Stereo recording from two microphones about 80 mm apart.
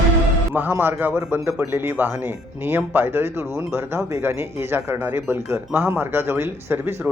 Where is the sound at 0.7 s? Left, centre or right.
Right.